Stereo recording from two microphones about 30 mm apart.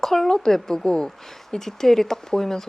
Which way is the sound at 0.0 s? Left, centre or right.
Centre.